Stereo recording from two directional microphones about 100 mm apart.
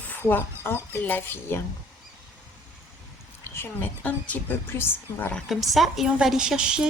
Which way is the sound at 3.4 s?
20° left (ahead or behind).